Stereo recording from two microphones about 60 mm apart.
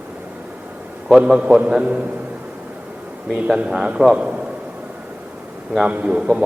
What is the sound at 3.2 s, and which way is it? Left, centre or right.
A man's voice, centre.